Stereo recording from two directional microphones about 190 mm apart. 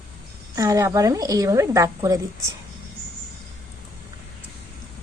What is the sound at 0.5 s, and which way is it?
A woman's voice, 15° right (ahead or behind).